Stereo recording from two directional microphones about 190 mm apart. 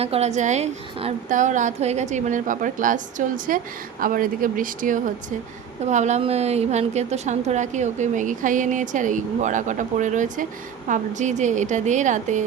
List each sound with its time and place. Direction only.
0.0 s a woman's voice: 35° right (ahead or behind)